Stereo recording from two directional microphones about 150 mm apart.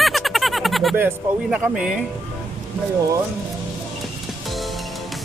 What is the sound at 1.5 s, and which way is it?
Speech, 5° right (ahead or behind).